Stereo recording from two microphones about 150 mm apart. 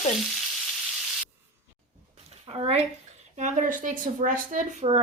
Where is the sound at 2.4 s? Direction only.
40° right (ahead or behind).